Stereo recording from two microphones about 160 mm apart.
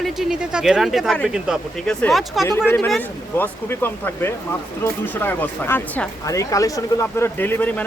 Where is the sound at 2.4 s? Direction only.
15° left (ahead or behind).